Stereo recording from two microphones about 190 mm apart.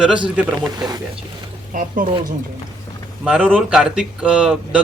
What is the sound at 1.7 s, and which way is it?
Speech, 45° right (ahead or behind).